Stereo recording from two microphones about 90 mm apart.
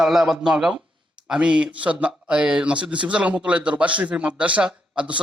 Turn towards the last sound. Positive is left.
turn(degrees=-10)  # may be behind; listen again after turning